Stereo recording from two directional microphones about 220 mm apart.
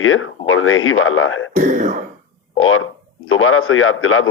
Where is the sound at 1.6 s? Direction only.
35° right (ahead or behind).